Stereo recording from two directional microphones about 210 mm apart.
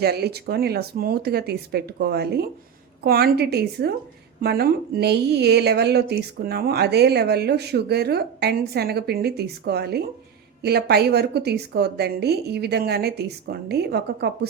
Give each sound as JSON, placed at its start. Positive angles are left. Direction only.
{"t": 0.0, "sound": "a woman's voice", "side_deg": -50}